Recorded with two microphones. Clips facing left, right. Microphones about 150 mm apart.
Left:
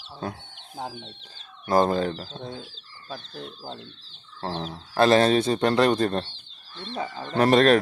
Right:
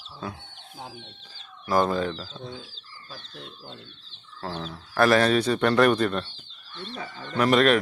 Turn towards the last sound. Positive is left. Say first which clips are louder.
# left 2 dB
turn(degrees=35)  # may be behind; listen again after turning